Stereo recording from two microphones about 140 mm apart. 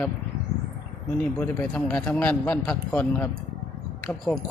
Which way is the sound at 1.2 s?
10° left (ahead or behind).